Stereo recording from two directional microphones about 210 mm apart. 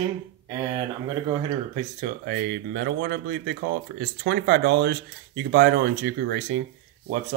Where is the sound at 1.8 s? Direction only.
40° right (ahead or behind).